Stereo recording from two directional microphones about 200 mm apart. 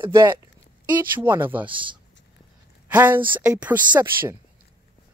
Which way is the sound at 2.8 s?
10° right (ahead or behind).